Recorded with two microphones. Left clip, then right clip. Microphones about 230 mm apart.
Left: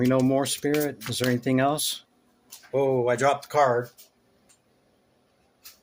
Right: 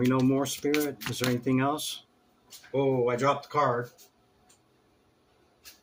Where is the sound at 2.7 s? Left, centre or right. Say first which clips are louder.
Left 3 dB; left.